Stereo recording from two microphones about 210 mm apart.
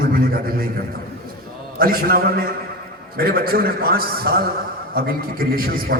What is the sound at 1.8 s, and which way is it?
A man's voice, 45° right (ahead or behind).